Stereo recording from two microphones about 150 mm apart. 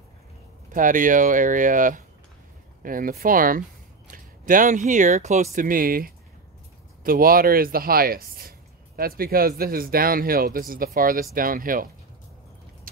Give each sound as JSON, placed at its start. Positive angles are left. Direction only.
{"t": 0.7, "sound": "speech", "side_deg": -60}